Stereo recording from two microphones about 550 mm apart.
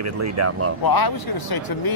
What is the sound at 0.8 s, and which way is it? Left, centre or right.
Speech, left.